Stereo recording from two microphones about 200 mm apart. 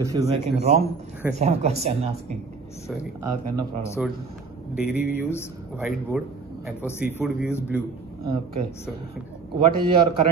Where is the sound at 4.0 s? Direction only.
5° right (ahead or behind).